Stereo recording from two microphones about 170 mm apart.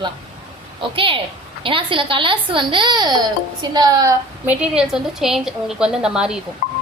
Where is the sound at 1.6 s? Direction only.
30° right (ahead or behind).